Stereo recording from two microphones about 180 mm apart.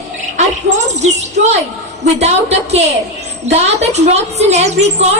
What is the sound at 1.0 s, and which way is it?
A woman's voice, 40° right (ahead or behind).